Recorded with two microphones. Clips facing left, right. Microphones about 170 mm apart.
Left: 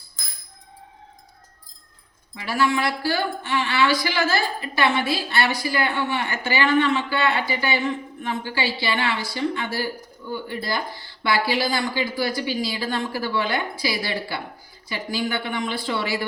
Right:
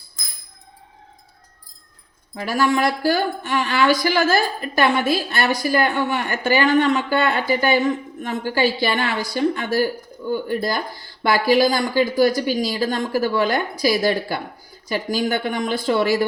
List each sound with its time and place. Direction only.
2.3 s a woman's voice: 45° right (ahead or behind)